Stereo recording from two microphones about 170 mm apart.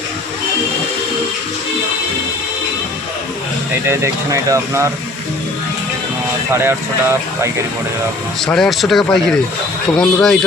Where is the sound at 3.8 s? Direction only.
15° right (ahead or behind).